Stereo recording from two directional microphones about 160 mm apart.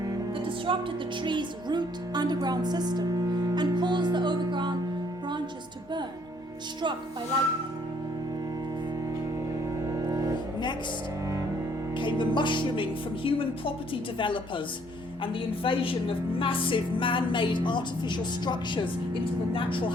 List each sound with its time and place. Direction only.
0.0 s music: 30° right (ahead or behind)
1.2 s speech: 30° right (ahead or behind)
9.6 s music: 20° right (ahead or behind)
11.9 s a woman's voice: 30° left (ahead or behind)